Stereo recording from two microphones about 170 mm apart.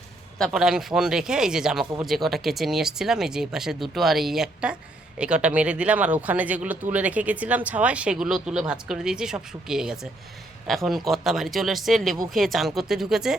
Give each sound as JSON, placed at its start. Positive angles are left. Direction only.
{"t": 0.3, "sound": "speech", "side_deg": 0}